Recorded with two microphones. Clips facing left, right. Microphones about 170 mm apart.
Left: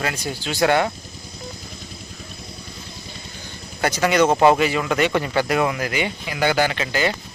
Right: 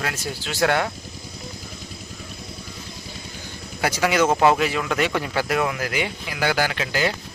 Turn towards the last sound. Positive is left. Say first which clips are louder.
# left 2 dB
turn(degrees=0)  # may be behind; listen again after turning